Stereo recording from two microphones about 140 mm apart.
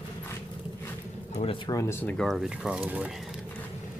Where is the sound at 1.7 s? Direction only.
20° left (ahead or behind).